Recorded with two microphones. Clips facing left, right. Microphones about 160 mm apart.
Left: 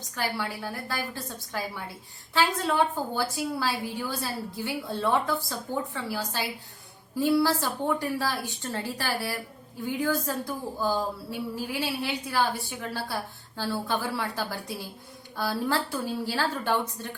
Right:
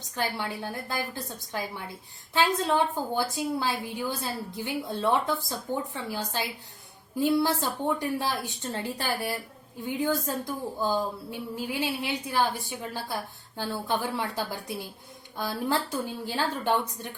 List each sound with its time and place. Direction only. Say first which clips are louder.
0.2 s a woman's voice: even; 20° right (ahead or behind)